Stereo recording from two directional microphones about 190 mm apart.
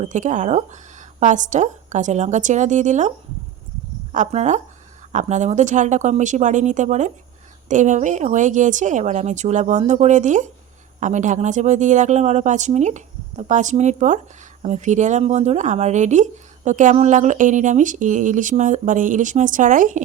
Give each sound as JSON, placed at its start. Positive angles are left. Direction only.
{"t": 0.0, "sound": "speech", "side_deg": -40}
{"t": 4.1, "sound": "speech", "side_deg": -35}